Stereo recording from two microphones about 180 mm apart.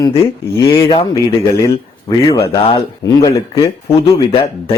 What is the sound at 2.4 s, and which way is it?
Speech, 30° left (ahead or behind).